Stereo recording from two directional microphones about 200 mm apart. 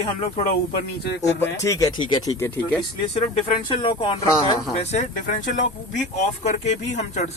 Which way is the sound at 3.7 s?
25° left (ahead or behind).